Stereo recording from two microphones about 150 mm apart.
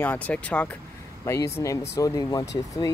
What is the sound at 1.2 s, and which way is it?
Speech, 20° left (ahead or behind).